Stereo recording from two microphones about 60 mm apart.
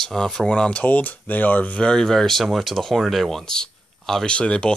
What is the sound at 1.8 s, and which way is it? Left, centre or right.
Speech, centre.